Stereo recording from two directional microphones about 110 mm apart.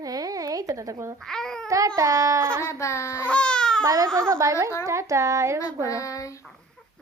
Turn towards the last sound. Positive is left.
turn(degrees=30)  # may be behind; listen again after turning